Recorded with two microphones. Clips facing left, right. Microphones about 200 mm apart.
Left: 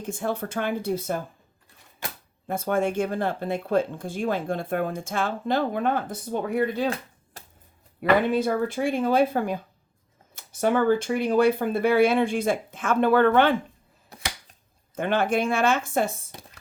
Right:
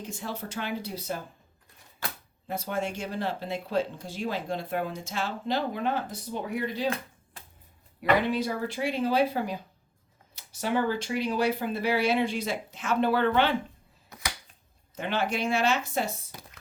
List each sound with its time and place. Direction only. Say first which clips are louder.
0.0 s speech: left 7 dB; 50° left (ahead or behind)
2.5 s speech: left 7 dB; 50° left (ahead or behind)
7.3 s a sound: left 4 dB; 40° left (ahead or behind)
8.3 s speech: left 6 dB; 55° left (ahead or behind)
14.1 s a sound: left 2 dB; 25° left (ahead or behind)
14.9 s speech: left 6 dB; 50° left (ahead or behind)